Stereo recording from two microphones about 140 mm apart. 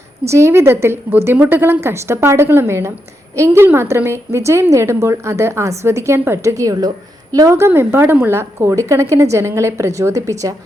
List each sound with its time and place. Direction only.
0.3 s a woman's voice: 20° right (ahead or behind)